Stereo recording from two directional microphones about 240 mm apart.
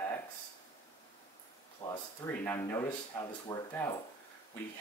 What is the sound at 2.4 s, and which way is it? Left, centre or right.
Speech, centre.